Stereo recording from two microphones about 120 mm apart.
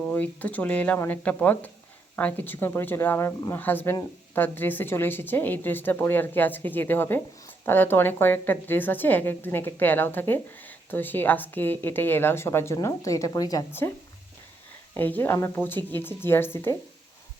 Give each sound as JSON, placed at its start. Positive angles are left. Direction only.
{"t": 0.0, "sound": "a woman's voice", "side_deg": 15}
{"t": 13.7, "sound": "a woman's voice", "side_deg": 20}
{"t": 14.9, "sound": "a woman's voice", "side_deg": 15}